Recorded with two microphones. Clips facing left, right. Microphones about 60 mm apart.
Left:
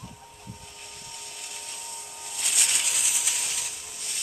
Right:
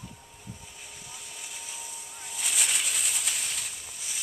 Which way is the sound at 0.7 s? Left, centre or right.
Centre.